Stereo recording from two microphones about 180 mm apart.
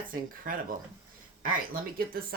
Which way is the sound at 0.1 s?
50° right (ahead or behind).